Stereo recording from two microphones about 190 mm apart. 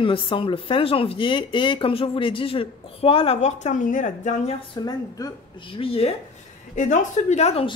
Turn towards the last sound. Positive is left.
turn(degrees=35)  # may be behind; listen again after turning